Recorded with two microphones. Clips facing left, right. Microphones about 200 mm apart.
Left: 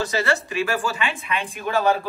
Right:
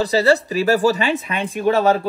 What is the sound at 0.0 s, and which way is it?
Speech, 35° right (ahead or behind).